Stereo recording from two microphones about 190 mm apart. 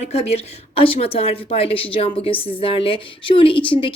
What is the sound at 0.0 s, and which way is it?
A woman's voice, 35° left (ahead or behind).